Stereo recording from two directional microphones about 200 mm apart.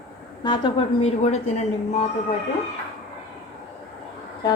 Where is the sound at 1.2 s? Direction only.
35° left (ahead or behind).